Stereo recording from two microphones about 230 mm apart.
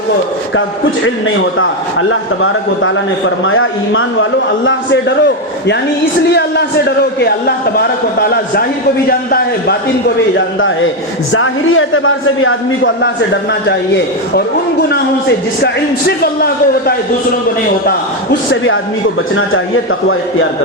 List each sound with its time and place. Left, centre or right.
0.5 s a man's voice: left
11.3 s a man's voice: left
18.5 s a man's voice: left